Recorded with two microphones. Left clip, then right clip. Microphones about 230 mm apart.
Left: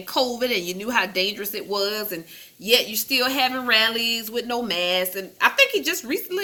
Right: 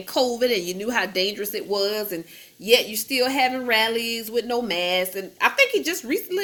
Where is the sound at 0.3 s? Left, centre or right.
Left.